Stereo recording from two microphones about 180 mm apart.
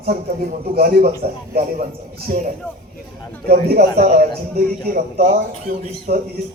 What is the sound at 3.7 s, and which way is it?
Speech, 50° right (ahead or behind).